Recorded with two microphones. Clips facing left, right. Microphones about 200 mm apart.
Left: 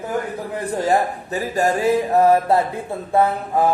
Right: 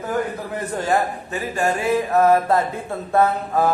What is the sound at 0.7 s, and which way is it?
Speech, 35° left (ahead or behind).